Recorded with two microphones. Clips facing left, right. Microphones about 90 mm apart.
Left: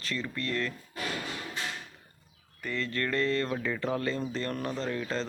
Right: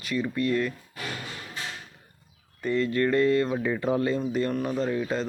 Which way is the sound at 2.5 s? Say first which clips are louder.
Right 8 dB; 20° right (ahead or behind).